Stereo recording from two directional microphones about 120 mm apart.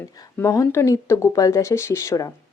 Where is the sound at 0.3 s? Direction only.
25° left (ahead or behind).